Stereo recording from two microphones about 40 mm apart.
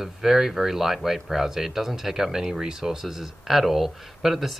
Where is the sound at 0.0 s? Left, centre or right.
Centre.